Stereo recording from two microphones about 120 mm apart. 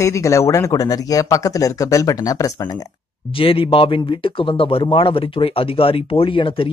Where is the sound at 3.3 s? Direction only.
50° left (ahead or behind).